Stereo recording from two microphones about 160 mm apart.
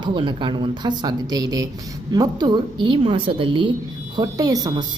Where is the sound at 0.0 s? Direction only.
30° right (ahead or behind).